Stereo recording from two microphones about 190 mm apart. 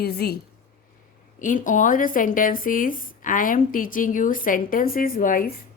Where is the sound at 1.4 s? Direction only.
45° left (ahead or behind).